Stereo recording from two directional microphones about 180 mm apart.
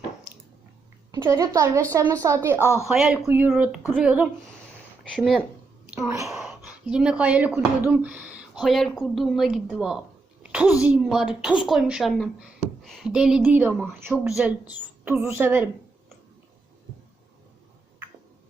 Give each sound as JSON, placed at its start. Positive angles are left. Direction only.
{"t": 1.1, "sound": "a woman's voice", "side_deg": -20}
{"t": 2.6, "sound": "a woman's voice", "side_deg": 15}
{"t": 2.8, "sound": "a woman's voice", "side_deg": -5}
{"t": 5.9, "sound": "a woman's voice", "side_deg": -15}
{"t": 6.3, "sound": "a woman's voice", "side_deg": -5}